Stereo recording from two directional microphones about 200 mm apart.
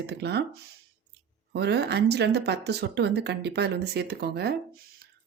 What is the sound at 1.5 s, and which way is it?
A woman's voice, 55° right (ahead or behind).